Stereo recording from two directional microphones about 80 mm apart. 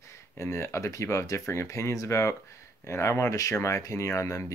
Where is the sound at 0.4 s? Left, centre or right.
Left.